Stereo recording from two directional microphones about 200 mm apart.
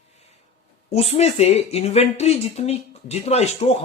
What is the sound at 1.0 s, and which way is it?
Speech, 30° left (ahead or behind).